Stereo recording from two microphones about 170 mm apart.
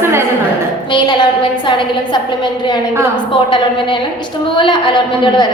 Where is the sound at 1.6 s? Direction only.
30° left (ahead or behind).